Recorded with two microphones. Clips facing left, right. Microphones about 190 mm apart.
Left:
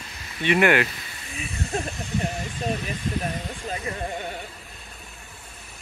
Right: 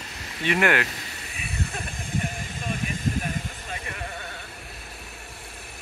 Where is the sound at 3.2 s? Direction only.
40° left (ahead or behind); by 4.5 s 20° left (ahead or behind).